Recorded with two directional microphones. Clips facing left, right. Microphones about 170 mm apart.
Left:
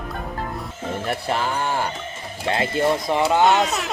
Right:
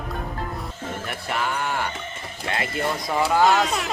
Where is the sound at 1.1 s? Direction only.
30° left (ahead or behind).